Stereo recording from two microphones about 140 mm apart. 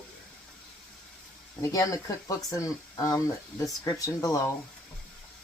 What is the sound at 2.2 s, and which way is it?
Speech, 25° left (ahead or behind).